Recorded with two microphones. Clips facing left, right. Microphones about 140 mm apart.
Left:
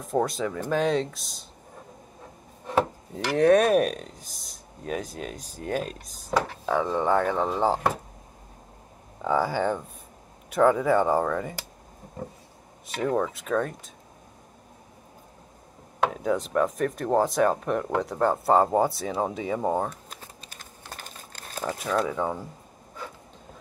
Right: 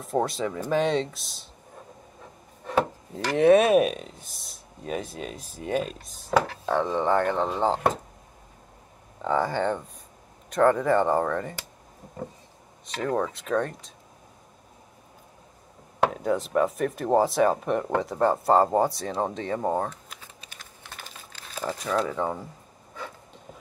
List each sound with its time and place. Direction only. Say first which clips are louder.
0.0 s speech: even; centre (ahead or behind)
3.3 s speech: right 1 dB; 5° right (ahead or behind)
9.2 s speech: even; 5° left (ahead or behind)
12.8 s speech: left 1 dB; 5° left (ahead or behind)
16.1 s speech: even; centre (ahead or behind)
20.1 s a sound: left 2 dB; 40° left (ahead or behind)
21.6 s speech: even; 5° left (ahead or behind)